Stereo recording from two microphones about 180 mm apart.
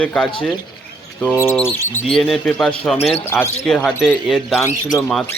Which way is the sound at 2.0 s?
Centre (ahead or behind).